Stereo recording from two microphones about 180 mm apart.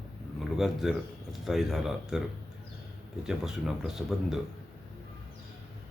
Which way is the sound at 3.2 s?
5° right (ahead or behind).